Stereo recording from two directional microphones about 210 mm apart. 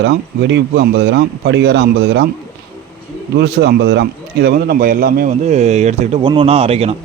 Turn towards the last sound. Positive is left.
turn(degrees=-30)  # may be behind; listen again after turning